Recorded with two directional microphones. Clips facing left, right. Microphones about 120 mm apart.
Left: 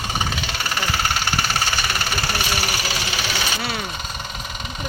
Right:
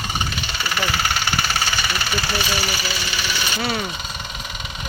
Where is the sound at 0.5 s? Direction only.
40° left (ahead or behind); by 3.2 s 75° left (ahead or behind).